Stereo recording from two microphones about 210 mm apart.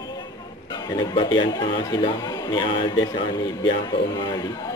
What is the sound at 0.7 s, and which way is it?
Speech, 20° left (ahead or behind).